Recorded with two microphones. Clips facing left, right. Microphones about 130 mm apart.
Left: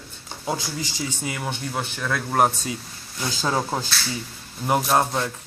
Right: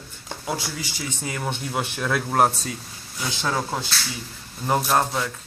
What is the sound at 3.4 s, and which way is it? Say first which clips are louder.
Speech: left 2 dB; 15° left (ahead or behind).